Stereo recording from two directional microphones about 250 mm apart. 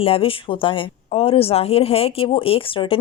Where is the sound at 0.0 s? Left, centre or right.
Left.